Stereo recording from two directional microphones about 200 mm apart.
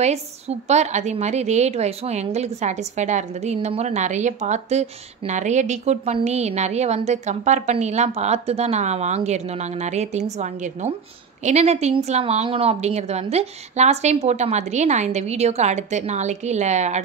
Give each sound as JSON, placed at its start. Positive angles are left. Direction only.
{"t": 0.0, "sound": "a woman's voice", "side_deg": -35}